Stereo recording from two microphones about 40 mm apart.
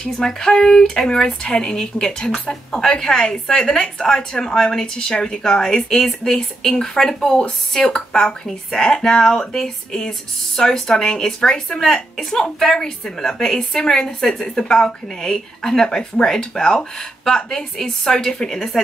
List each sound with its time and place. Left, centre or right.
0.0 s a woman's voice: centre